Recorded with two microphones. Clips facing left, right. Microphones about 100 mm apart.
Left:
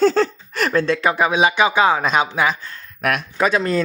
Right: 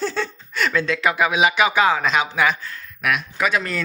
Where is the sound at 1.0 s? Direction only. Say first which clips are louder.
Right 1 dB; 30° left (ahead or behind).